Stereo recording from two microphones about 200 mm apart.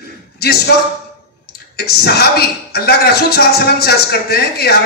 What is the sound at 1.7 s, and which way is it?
A man's voice, 50° left (ahead or behind).